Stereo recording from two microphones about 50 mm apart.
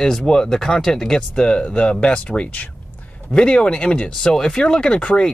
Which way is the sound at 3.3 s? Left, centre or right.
Left.